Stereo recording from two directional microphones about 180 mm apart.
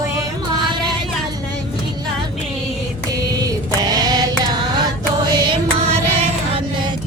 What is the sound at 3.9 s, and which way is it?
Music, 20° right (ahead or behind).